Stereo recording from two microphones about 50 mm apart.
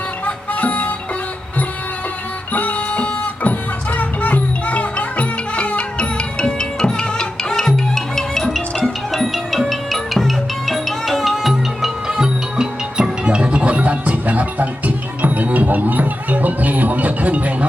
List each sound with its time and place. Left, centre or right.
0.3 s music: left
2.5 s music: left; by 11.9 s centre
12.0 s music: centre; by 17.7 s right